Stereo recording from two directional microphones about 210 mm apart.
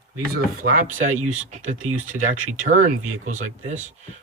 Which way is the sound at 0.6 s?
35° right (ahead or behind).